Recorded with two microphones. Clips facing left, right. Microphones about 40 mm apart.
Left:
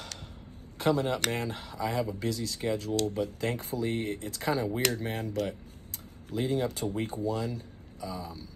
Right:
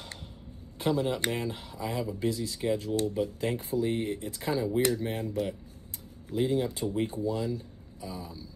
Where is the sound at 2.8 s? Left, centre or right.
Left.